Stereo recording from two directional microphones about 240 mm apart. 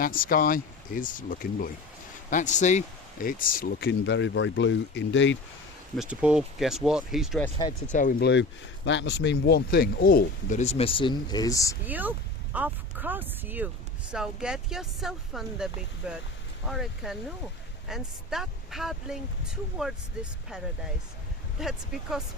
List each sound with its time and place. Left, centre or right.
0.0 s speech: left
6.0 s speech: centre
7.9 s speech: left
8.3 s speech: left; by 11.8 s centre
11.9 s speech: centre
21.6 s speech: centre